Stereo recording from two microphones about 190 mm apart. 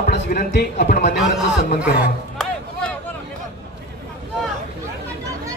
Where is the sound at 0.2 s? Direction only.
50° left (ahead or behind).